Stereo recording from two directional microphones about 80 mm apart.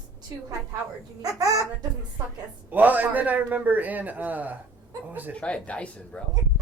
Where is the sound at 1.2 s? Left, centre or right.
Right.